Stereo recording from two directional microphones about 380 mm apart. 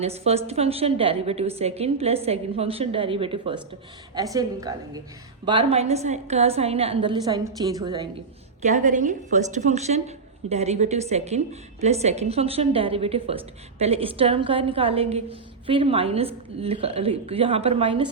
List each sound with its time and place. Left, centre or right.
0.0 s a woman's voice: centre